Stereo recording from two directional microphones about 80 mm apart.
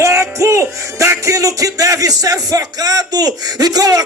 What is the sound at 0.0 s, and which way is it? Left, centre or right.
Music, right.